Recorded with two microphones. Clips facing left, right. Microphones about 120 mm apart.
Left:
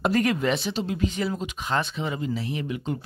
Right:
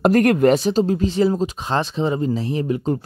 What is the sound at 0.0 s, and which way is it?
Speech, 50° right (ahead or behind).